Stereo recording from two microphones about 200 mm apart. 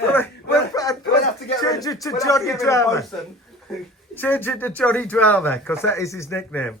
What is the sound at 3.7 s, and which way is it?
Speech, centre (ahead or behind).